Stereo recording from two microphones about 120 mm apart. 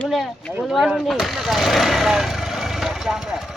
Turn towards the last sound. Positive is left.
turn(degrees=-5)  # may be behind; listen again after turning